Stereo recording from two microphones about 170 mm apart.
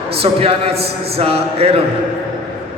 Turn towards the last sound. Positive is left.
turn(degrees=-35)  # may be behind; listen again after turning